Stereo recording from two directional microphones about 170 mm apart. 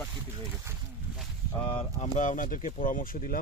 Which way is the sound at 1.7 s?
35° left (ahead or behind).